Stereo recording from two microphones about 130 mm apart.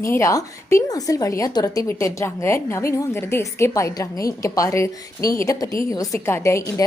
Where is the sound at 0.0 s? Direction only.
25° left (ahead or behind).